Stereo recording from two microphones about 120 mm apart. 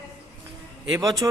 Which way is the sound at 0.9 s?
30° right (ahead or behind).